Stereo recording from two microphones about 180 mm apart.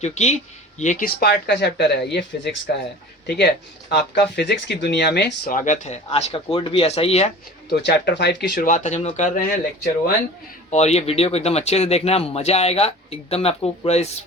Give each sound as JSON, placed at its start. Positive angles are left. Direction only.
{"t": 0.0, "sound": "speech", "side_deg": 40}
{"t": 7.7, "sound": "speech", "side_deg": 75}
{"t": 8.7, "sound": "speech", "side_deg": 40}
{"t": 10.7, "sound": "speech", "side_deg": 35}